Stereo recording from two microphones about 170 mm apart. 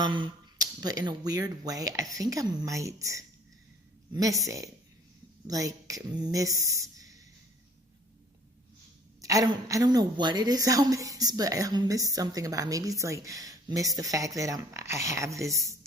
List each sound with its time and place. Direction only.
0.0 s a woman's voice: 25° right (ahead or behind)
9.2 s a woman's voice: 20° right (ahead or behind)